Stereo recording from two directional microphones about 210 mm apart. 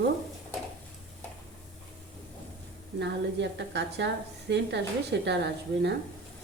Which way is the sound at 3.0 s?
55° right (ahead or behind).